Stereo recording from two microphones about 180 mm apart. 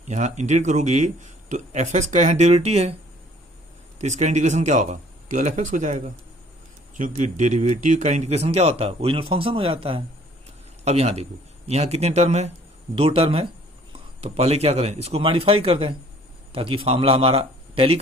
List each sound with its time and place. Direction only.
0.0 s speech: 40° right (ahead or behind)
3.9 s speech: 40° right (ahead or behind)